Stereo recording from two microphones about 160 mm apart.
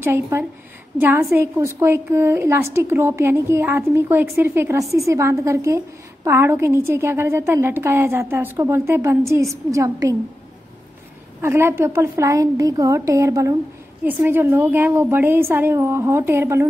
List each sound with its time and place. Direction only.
0.0 s a woman's voice: 15° right (ahead or behind)
11.4 s a woman's voice: 15° right (ahead or behind)